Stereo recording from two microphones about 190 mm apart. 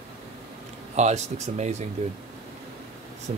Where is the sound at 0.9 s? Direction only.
35° right (ahead or behind).